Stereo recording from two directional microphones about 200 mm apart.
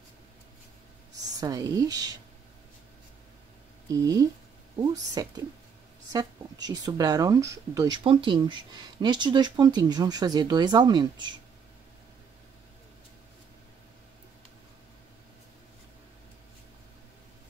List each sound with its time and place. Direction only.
1.4 s speech: 20° right (ahead or behind)
3.9 s speech: 20° right (ahead or behind)